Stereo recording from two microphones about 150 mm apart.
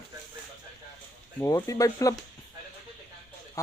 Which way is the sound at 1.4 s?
20° left (ahead or behind).